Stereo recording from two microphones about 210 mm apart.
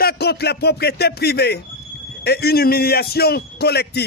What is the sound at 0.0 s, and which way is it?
Speech, 50° left (ahead or behind).